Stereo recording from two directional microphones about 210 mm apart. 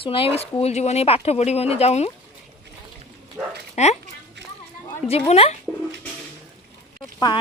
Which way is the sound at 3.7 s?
35° left (ahead or behind).